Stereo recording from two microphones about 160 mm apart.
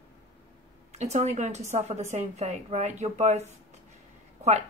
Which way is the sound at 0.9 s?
45° right (ahead or behind).